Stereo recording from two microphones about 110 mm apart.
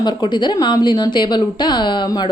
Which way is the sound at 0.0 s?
40° left (ahead or behind).